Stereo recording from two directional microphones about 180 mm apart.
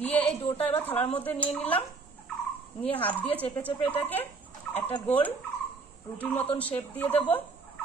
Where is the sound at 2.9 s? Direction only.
10° left (ahead or behind).